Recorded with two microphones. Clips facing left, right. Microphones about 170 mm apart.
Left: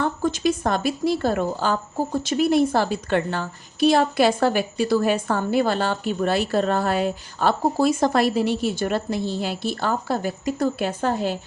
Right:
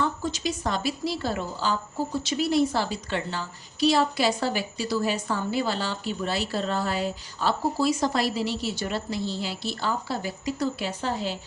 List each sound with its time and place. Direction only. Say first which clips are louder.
0.0 s speech: left 6 dB; 55° left (ahead or behind)